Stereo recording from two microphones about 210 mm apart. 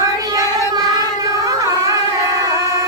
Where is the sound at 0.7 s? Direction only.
15° right (ahead or behind).